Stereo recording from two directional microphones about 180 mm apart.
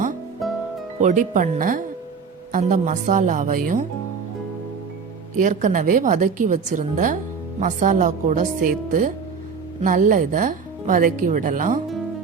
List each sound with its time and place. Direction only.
1.0 s speech: 45° right (ahead or behind)
5.4 s speech: 45° right (ahead or behind)